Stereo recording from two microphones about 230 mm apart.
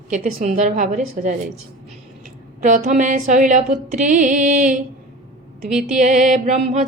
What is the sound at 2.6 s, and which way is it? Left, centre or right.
A woman's voice, right.